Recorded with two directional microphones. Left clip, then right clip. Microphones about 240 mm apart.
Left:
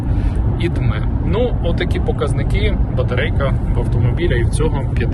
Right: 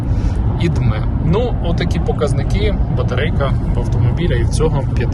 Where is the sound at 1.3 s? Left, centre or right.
Centre.